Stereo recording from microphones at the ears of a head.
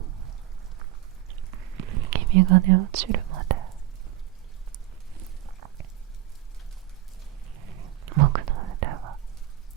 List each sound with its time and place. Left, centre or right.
0.0 s rain: right
1.3 s whispering: right
5.1 s a sound: right
7.4 s whispering: right